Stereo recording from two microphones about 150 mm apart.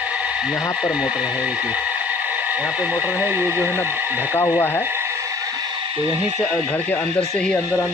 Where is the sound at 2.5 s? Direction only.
10° right (ahead or behind).